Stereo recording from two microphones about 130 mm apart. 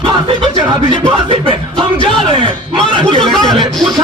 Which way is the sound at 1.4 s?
40° right (ahead or behind).